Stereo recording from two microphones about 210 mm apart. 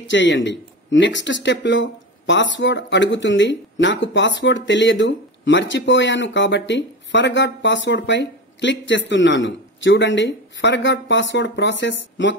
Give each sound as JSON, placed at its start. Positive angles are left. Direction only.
{"t": 0.1, "sound": "speech", "side_deg": 60}